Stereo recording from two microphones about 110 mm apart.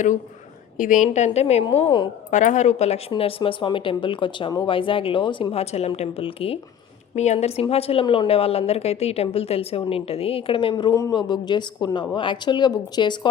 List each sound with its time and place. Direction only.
1.0 s speech: 90° left
3.2 s speech: 60° left (ahead or behind)
5.5 s a woman's voice: 70° left (ahead or behind)
6.0 s a woman's voice: 60° left (ahead or behind)
7.2 s a woman's voice: 80° left; by 8.0 s 65° left (ahead or behind)
8.0 s speech: 45° left (ahead or behind)
8.3 s a woman's voice: 60° left (ahead or behind); by 13.1 s 40° left (ahead or behind)